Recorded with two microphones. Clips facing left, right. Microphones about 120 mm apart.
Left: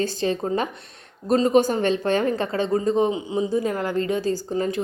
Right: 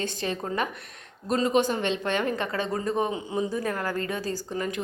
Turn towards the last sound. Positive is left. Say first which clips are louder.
# left 6 dB
turn(degrees=30)  # may be behind; listen again after turning